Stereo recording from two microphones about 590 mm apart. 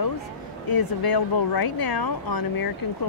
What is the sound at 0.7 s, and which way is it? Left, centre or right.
Speech, left.